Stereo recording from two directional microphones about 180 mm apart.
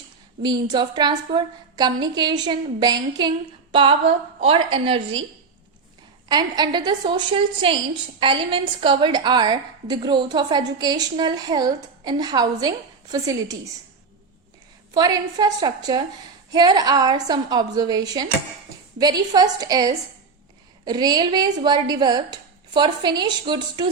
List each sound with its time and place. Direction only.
0.4 s a woman's voice: 25° right (ahead or behind)
6.2 s a woman's voice: 25° right (ahead or behind)
14.9 s a woman's voice: 20° right (ahead or behind)